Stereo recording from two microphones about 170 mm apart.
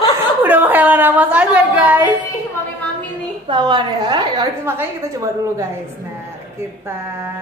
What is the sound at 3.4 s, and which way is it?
A woman's voice, 25° right (ahead or behind).